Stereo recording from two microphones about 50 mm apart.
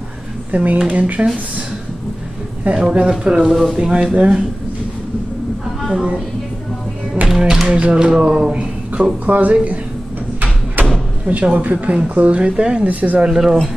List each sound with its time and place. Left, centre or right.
0.5 s speech: right
2.7 s speech: centre
5.8 s a sound: centre
7.2 s speech: centre
7.6 s speech: right
10.8 s door: right
11.2 s speech: right
12.8 s speech: right
13.3 s speech: centre